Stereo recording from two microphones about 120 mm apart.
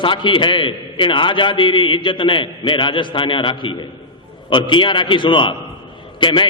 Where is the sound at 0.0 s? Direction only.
45° left (ahead or behind).